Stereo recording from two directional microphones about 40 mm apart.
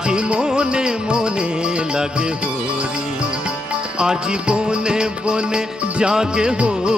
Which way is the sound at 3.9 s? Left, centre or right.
Centre.